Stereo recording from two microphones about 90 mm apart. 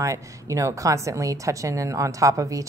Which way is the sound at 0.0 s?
35° right (ahead or behind).